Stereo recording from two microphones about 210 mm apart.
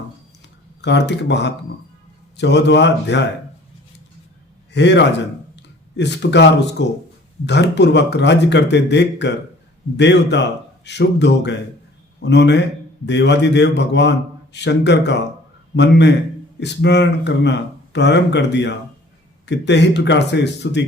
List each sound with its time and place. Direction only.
0.8 s a man's voice: 55° left (ahead or behind)
4.7 s a man's voice: 55° left (ahead or behind)